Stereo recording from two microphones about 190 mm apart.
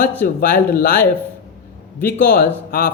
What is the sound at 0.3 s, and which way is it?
Speech, 50° left (ahead or behind).